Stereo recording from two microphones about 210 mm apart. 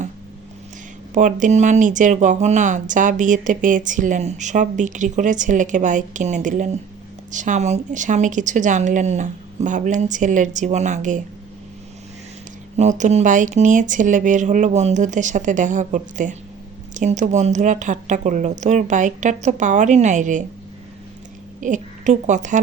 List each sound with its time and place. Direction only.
1.1 s speech: 35° right (ahead or behind)
12.7 s speech: 35° right (ahead or behind)
21.6 s a woman's voice: 35° right (ahead or behind)